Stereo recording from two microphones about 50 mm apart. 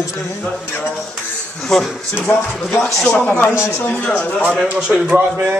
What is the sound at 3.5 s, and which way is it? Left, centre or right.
Speech, left.